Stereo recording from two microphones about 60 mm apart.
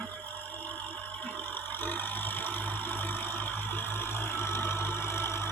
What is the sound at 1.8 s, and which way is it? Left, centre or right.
Vehicle, left.